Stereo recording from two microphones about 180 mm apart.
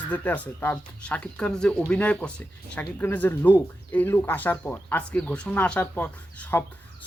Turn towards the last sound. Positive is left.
turn(degrees=10)  # may be behind; listen again after turning